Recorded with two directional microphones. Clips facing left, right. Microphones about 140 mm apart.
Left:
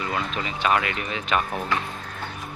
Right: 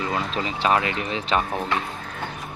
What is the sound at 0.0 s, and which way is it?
Speech, 25° right (ahead or behind).